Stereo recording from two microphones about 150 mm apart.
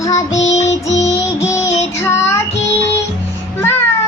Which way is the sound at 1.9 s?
15° left (ahead or behind).